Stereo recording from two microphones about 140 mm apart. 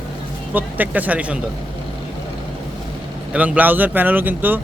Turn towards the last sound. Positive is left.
turn(degrees=-15)  # may be behind; listen again after turning